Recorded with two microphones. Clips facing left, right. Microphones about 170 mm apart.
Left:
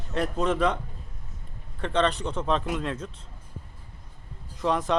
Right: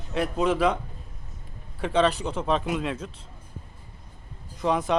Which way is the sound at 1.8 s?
5° right (ahead or behind).